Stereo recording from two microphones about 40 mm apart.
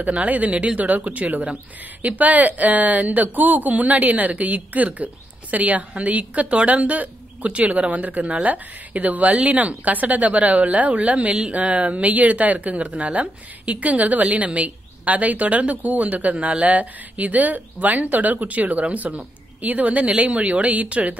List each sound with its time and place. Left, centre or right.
0.0 s a woman's voice: right